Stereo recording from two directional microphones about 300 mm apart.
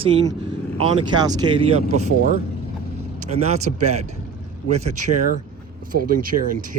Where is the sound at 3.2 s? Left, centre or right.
Right.